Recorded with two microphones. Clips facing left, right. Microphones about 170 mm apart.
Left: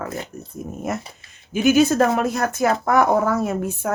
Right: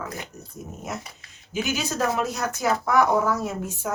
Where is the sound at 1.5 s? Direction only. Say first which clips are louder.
Left 12 dB; 60° left (ahead or behind).